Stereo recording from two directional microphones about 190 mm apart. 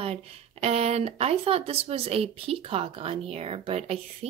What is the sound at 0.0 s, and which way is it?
Speech, 30° right (ahead or behind).